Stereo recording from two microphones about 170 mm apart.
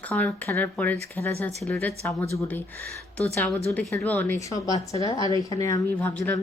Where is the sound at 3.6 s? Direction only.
15° left (ahead or behind).